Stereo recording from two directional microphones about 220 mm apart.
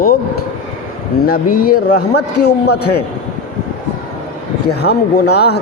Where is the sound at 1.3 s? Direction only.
40° left (ahead or behind).